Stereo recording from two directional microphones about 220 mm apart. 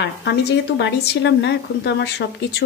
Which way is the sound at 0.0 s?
50° left (ahead or behind).